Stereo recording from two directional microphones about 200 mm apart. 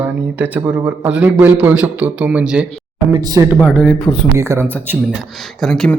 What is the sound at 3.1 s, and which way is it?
Speech, 15° right (ahead or behind).